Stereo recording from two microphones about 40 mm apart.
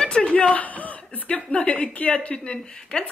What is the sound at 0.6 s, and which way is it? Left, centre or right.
Speech, left.